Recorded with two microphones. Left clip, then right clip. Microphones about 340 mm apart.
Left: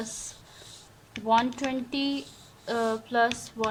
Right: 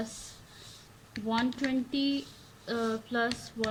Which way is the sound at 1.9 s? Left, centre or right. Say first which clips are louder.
Left 1 dB; centre.